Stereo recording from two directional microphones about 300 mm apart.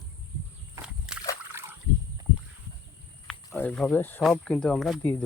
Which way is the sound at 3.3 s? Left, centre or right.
Centre.